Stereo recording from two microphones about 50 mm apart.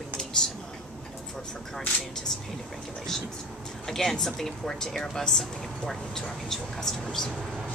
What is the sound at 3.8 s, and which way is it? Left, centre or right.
Speech, centre.